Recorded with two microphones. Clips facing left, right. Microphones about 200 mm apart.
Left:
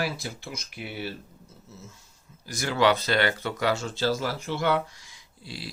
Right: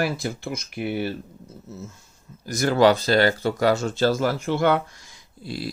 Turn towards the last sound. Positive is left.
turn(degrees=-50)  # may be behind; listen again after turning